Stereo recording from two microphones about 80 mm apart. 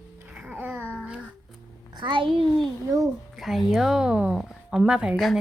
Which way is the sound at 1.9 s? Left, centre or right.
Right.